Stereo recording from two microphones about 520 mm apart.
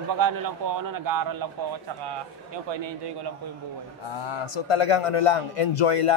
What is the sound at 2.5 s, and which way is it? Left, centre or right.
Speech, right.